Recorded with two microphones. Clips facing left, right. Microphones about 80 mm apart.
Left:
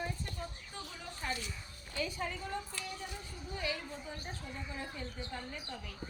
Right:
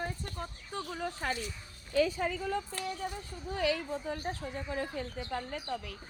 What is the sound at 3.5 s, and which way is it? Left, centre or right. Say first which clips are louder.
A woman's voice: right 8 dB; right.